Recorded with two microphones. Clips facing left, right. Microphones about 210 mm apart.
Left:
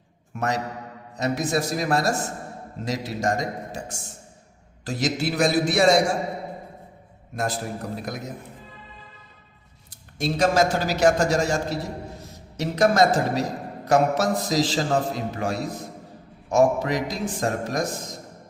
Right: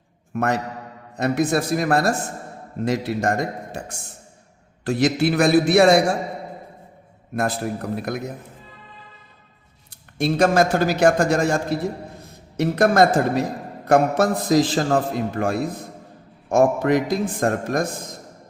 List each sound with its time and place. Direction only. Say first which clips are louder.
0.3 s a man's voice: right 4 dB; 55° right (ahead or behind)
7.3 s a man's voice: right 4 dB; 60° right (ahead or behind)
10.2 s a man's voice: right 3 dB; 60° right (ahead or behind)